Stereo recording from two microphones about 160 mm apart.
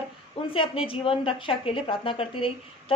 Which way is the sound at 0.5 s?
35° left (ahead or behind).